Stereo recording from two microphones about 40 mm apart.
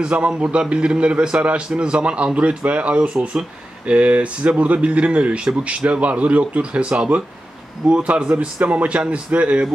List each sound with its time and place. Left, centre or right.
0.0 s a man's voice: right